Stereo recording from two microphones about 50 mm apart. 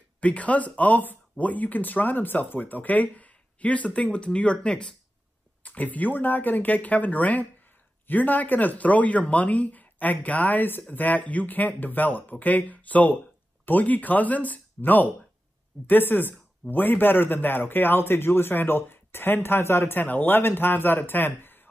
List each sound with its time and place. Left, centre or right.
0.2 s speech: left
5.6 s a man's voice: left